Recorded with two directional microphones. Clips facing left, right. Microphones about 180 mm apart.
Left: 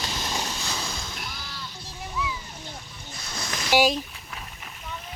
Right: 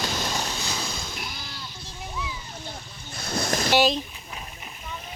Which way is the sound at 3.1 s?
55° right (ahead or behind).